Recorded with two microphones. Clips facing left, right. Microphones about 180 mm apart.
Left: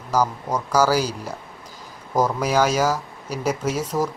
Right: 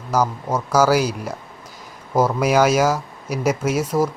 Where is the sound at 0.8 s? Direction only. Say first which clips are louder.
Right 3 dB; 10° right (ahead or behind).